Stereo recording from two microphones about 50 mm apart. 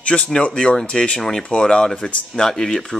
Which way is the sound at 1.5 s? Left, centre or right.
Centre.